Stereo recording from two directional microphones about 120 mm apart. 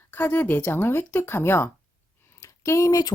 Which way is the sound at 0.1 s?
15° left (ahead or behind).